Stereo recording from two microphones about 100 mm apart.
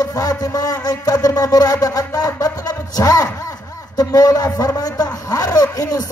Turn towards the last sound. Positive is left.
turn(degrees=35)  # may be behind; listen again after turning